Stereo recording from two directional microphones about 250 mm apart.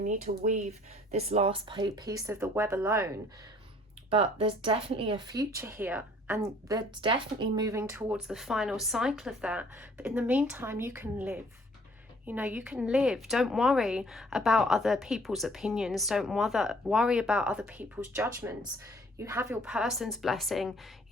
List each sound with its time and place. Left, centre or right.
0.0 s speech: right; by 3.1 s centre
4.1 s speech: right; by 20.7 s centre